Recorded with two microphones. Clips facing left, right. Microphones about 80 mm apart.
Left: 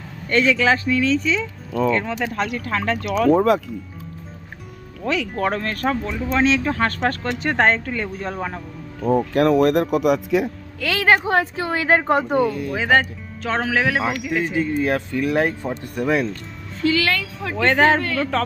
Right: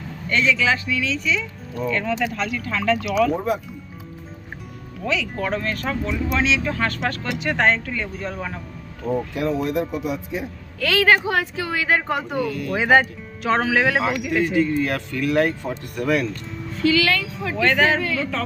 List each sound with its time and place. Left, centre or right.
0.3 s speech: left
2.3 s speech: left
3.3 s speech: left
5.0 s speech: left
8.5 s speech: centre
9.3 s speech: left
10.8 s speech: left
11.2 s speech: left
12.7 s speech: centre
14.0 s speech: centre
14.8 s speech: left
16.8 s speech: left
18.0 s speech: left